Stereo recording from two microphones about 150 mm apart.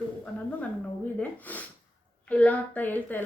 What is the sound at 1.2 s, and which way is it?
Speech, 10° left (ahead or behind).